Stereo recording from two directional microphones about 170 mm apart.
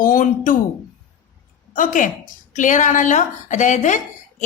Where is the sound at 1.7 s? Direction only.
50° left (ahead or behind).